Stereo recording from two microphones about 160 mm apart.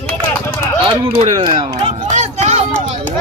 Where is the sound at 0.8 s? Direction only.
30° right (ahead or behind).